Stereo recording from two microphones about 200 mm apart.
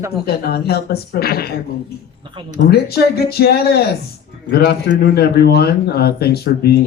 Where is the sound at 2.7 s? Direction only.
55° left (ahead or behind).